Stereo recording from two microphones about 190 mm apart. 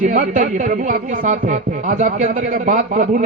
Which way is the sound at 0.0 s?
40° right (ahead or behind).